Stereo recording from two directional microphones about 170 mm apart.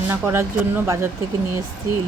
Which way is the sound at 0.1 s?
15° right (ahead or behind).